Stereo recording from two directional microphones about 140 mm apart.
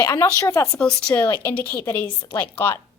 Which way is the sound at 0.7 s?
5° left (ahead or behind).